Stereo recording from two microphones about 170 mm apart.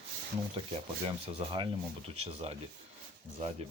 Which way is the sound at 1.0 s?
30° right (ahead or behind).